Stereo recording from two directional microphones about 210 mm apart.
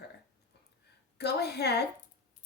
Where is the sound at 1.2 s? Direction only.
50° left (ahead or behind).